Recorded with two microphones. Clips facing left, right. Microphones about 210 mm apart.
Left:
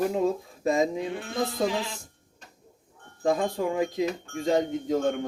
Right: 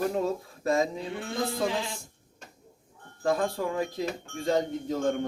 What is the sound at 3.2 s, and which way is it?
Speech, 15° left (ahead or behind).